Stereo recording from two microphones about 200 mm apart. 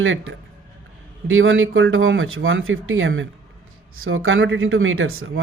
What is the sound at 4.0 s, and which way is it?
Speech, 90° right.